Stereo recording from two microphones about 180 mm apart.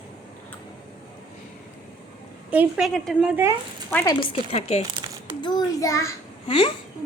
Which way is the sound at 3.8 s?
10° left (ahead or behind).